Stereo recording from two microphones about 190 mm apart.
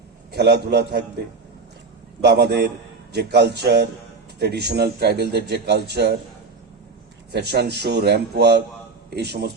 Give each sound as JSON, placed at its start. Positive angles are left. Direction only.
{"t": 0.3, "sound": "a man's voice", "side_deg": -60}
{"t": 2.2, "sound": "a man's voice", "side_deg": -60}
{"t": 7.3, "sound": "a man's voice", "side_deg": -60}